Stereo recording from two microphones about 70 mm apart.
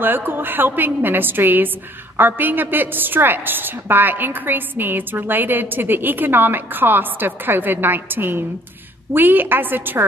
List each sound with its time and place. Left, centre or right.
0.0 s a woman's voice: right